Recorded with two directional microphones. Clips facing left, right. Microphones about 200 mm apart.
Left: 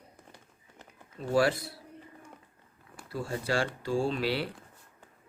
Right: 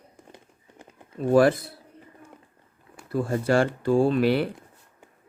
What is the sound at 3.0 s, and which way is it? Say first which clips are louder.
Speech: right 9 dB; 50° right (ahead or behind).